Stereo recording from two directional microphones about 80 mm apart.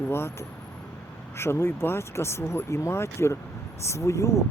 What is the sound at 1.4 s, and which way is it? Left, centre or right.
Speech, left.